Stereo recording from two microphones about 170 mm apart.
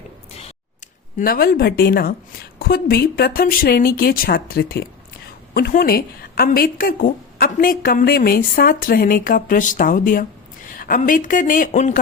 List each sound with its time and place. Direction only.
1.2 s a woman's voice: 60° left (ahead or behind)